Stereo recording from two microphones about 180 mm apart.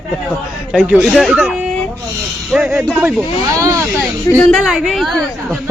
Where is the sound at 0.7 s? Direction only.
5° right (ahead or behind).